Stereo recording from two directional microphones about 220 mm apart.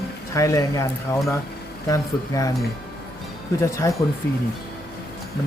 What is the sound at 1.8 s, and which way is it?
Speech, 15° left (ahead or behind).